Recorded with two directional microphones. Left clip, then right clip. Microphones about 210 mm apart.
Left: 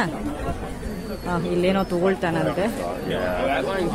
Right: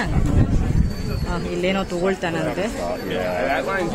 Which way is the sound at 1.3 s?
10° left (ahead or behind).